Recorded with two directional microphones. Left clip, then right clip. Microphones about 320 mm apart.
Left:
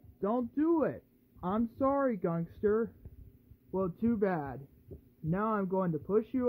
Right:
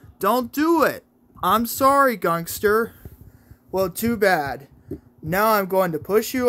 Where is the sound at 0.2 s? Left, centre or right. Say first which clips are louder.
Right 12 dB; centre.